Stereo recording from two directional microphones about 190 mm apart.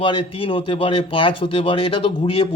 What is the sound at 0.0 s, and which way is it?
Speech, 25° left (ahead or behind).